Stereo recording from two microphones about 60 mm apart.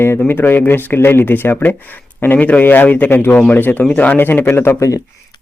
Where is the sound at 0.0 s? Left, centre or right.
Left.